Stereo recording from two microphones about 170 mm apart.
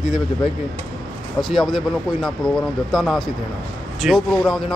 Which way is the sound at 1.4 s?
Centre (ahead or behind).